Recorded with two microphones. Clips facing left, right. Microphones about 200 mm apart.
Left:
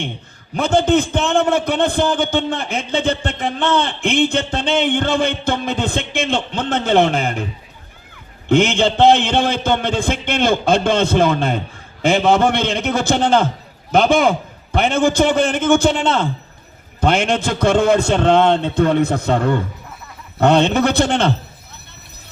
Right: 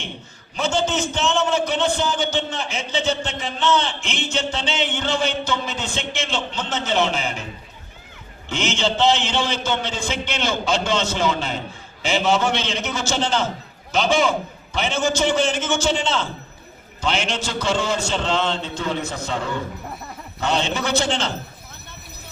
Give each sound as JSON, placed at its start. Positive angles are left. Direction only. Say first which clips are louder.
{"t": 0.5, "sound": "a man's voice", "louder": "left 7 dB", "side_deg": 55}
{"t": 8.4, "sound": "a man's voice", "louder": "left 9 dB", "side_deg": 55}